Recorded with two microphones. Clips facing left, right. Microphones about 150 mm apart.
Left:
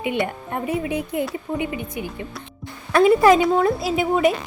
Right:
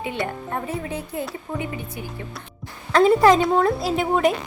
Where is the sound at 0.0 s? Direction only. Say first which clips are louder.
Left 3 dB; 20° left (ahead or behind).